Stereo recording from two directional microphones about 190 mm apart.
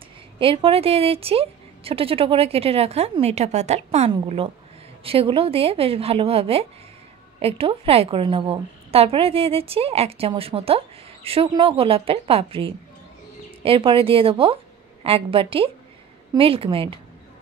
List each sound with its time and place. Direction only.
0.4 s a woman's voice: 30° right (ahead or behind)